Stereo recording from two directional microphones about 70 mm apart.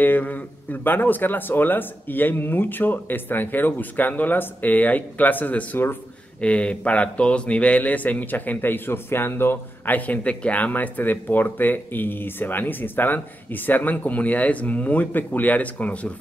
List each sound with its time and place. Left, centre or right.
0.0 s speech: left